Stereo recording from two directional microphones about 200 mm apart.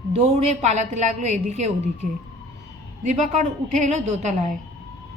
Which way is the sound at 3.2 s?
35° right (ahead or behind).